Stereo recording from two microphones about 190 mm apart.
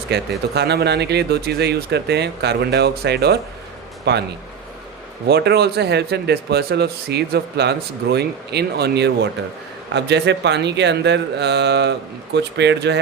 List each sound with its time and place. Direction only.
0.1 s speech: 60° right (ahead or behind)
5.3 s speech: 60° right (ahead or behind)